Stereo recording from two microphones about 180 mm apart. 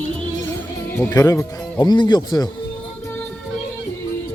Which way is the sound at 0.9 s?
15° left (ahead or behind).